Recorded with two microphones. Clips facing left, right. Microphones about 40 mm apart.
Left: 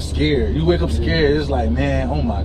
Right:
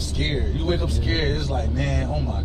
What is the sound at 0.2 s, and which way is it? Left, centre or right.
A man's voice, left.